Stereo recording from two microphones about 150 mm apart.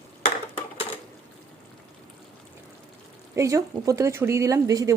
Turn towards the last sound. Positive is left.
turn(degrees=-20)  # may be behind; listen again after turning